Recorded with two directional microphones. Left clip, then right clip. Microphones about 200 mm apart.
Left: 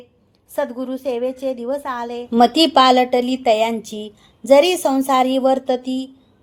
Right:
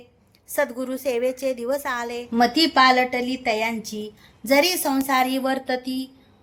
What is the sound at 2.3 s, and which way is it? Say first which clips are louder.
A woman's voice: left 6 dB; 35° left (ahead or behind).